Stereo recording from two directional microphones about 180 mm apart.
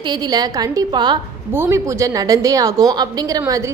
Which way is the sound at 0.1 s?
20° right (ahead or behind).